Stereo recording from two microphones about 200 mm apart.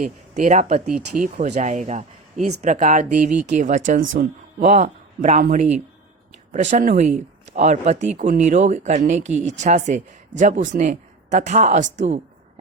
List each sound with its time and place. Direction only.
0.0 s speech: 35° right (ahead or behind)
0.9 s speech: 5° right (ahead or behind)
1.2 s speech: 40° right (ahead or behind)